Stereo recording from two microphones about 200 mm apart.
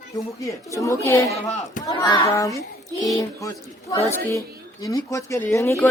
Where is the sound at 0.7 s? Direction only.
15° left (ahead or behind).